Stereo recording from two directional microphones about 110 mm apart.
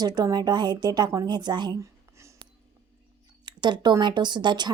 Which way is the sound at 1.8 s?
25° right (ahead or behind).